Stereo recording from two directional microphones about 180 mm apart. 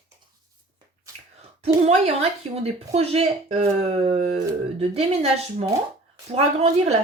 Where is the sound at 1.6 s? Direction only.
35° right (ahead or behind).